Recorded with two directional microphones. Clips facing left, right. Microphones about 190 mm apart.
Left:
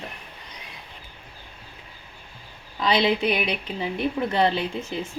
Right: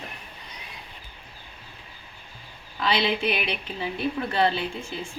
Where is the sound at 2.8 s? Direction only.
20° left (ahead or behind).